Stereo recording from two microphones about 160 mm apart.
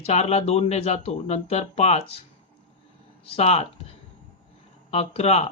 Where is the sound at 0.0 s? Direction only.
40° left (ahead or behind).